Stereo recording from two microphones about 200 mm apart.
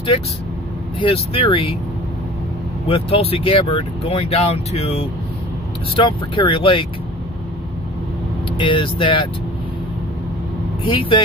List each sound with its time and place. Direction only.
1.0 s speech: 30° left (ahead or behind)
2.9 s speech: 30° left (ahead or behind)
8.5 s speech: 25° left (ahead or behind)
10.8 s speech: 25° left (ahead or behind)